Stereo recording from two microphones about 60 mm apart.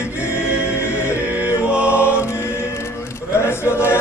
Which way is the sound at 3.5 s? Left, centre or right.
Left.